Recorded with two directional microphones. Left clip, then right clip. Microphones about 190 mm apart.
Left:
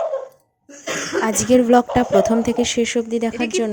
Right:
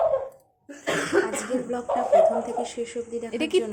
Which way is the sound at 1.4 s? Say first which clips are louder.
Left 15 dB; 45° left (ahead or behind).